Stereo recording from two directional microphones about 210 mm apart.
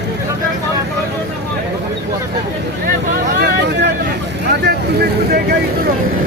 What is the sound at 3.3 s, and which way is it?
Vehicle, 50° right (ahead or behind).